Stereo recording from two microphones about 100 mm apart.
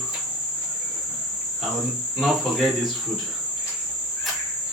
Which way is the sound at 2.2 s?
Centre (ahead or behind).